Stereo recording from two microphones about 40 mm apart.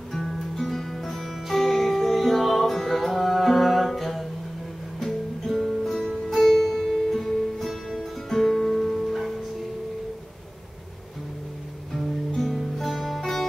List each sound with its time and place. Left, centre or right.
0.1 s music: centre
12.4 s music: centre